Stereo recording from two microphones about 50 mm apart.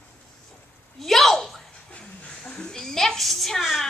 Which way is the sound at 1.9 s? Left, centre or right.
Left.